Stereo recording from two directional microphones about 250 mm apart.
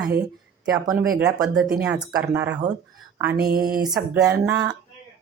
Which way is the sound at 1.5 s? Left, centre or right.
Centre.